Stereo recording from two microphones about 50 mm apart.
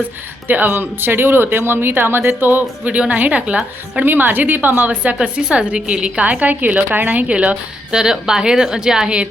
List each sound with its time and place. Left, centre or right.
0.4 s speech: right
2.9 s a woman's voice: right
4.0 s a woman's voice: right
5.2 s a woman's voice: centre
7.4 s a woman's voice: centre